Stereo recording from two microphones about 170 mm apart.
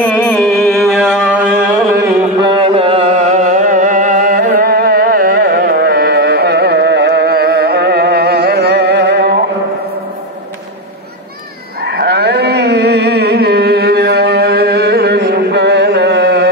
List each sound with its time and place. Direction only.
0.8 s music: 5° right (ahead or behind)
2.4 s music: 30° right (ahead or behind); by 9.4 s 75° right (ahead or behind)
11.8 s a sound: 75° right (ahead or behind); by 16.4 s 90° right